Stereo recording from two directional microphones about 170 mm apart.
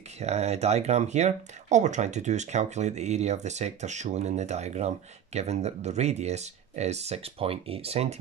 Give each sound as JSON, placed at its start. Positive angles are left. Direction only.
{"t": 0.2, "sound": "speech", "side_deg": -40}